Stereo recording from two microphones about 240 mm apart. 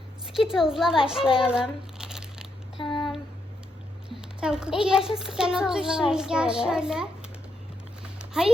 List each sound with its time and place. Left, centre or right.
0.3 s a child's voice: centre
1.4 s crumpling: centre
2.7 s a sound: centre
4.1 s a child's voice: centre
8.3 s speech: centre